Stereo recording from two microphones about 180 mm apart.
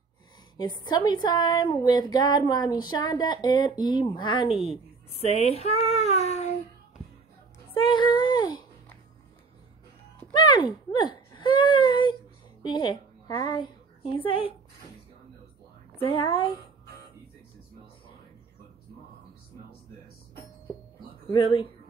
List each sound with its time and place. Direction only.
0.6 s a woman's voice: 25° left (ahead or behind)
7.7 s child singing: 30° left (ahead or behind)
10.3 s a sound: 25° left (ahead or behind)
12.6 s a woman's voice: 25° left (ahead or behind)
16.0 s a woman's voice: 25° left (ahead or behind)
21.3 s a woman's voice: 25° left (ahead or behind)